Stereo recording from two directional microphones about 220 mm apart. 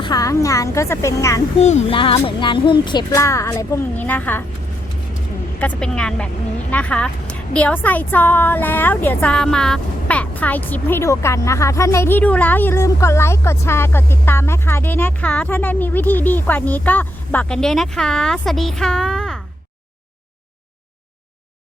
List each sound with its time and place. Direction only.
0.0 s a woman's voice: 15° left (ahead or behind)
1.5 s a woman's voice: 30° left (ahead or behind); by 4.4 s 10° left (ahead or behind)
5.5 s a woman's voice: 5° left (ahead or behind)